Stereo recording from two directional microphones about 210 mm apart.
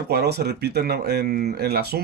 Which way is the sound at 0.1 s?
50° right (ahead or behind).